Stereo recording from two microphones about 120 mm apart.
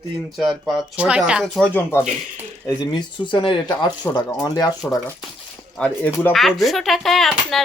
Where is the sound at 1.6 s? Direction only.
15° left (ahead or behind).